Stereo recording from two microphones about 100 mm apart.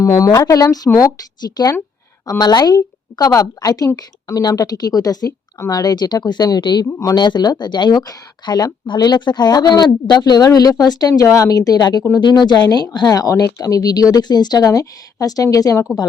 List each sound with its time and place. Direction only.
0.0 s speech: 35° left (ahead or behind)